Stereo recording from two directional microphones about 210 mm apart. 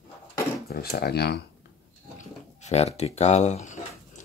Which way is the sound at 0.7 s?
50° left (ahead or behind).